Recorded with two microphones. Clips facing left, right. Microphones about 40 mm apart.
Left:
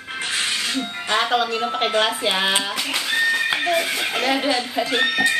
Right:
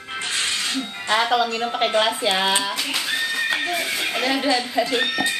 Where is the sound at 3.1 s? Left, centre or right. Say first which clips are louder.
Left 5 dB; centre.